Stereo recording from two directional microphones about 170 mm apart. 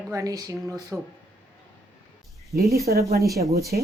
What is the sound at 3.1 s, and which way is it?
Speech, 60° right (ahead or behind).